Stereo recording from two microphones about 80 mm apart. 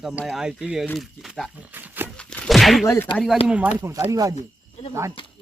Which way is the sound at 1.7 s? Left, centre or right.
Right.